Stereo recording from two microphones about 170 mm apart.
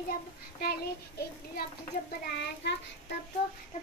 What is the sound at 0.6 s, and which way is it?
Child singing, 65° left (ahead or behind).